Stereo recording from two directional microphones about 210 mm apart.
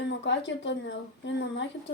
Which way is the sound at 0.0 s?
55° left (ahead or behind).